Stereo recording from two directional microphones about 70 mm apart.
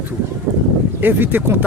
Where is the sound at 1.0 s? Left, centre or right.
Right.